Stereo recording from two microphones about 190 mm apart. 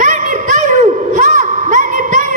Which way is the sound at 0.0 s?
40° right (ahead or behind).